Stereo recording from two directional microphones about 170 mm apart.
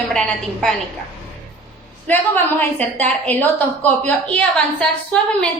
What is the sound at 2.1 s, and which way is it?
A woman's voice, 10° left (ahead or behind).